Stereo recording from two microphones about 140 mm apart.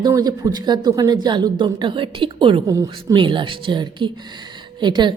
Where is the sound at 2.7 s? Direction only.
25° right (ahead or behind).